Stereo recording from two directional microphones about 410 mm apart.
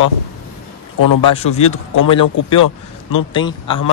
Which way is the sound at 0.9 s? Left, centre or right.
Left.